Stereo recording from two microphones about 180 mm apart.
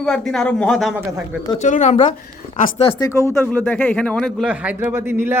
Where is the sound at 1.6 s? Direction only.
40° left (ahead or behind).